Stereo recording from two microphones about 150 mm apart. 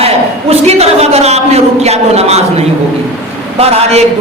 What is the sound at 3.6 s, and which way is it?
Speech, 45° right (ahead or behind).